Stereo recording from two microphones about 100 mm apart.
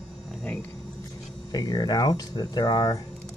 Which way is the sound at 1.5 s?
40° left (ahead or behind).